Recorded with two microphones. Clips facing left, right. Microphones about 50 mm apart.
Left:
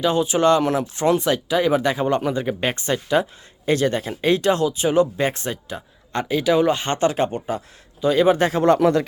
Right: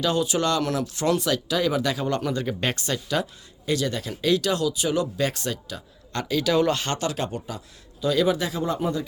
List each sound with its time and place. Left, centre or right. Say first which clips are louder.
0.0 s speech: left 5 dB; left
3.7 s speech: left 6 dB; left
8.4 s speech: left 8 dB; left
8.6 s speech: left 11 dB; left